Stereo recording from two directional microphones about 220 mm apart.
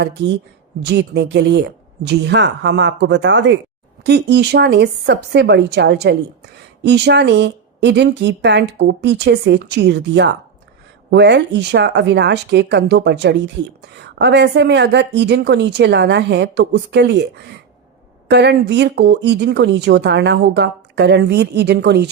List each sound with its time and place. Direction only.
0.8 s speech: 50° right (ahead or behind)